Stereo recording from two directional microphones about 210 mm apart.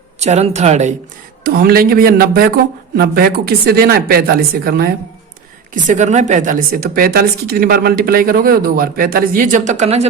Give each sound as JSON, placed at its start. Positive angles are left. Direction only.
{"t": 0.2, "sound": "a woman's voice", "side_deg": -30}
{"t": 1.5, "sound": "speech", "side_deg": -45}
{"t": 5.7, "sound": "speech", "side_deg": -35}